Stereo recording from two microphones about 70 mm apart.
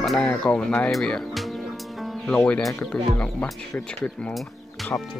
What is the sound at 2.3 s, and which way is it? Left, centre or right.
Speech, centre.